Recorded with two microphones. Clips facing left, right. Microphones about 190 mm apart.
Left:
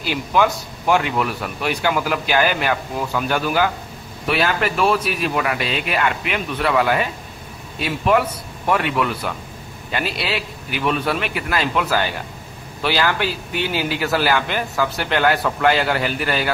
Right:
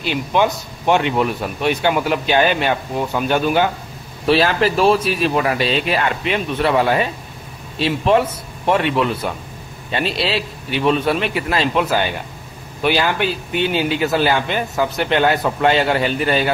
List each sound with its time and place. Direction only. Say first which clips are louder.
0.0 s speech: right 1 dB; 20° right (ahead or behind)